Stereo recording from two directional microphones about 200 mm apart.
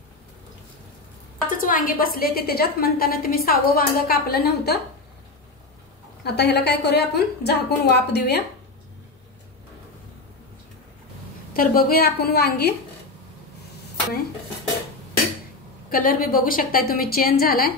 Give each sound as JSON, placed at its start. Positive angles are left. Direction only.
{"t": 1.5, "sound": "a woman's voice", "side_deg": 45}
{"t": 6.2, "sound": "a woman's voice", "side_deg": 55}
{"t": 11.5, "sound": "a woman's voice", "side_deg": 45}
{"t": 15.9, "sound": "a woman's voice", "side_deg": 45}